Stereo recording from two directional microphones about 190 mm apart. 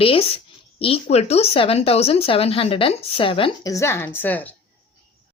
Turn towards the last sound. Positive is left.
turn(degrees=10)  # may be behind; listen again after turning